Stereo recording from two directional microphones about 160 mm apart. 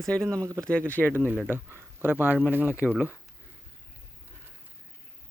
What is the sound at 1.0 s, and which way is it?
Speech, 15° right (ahead or behind).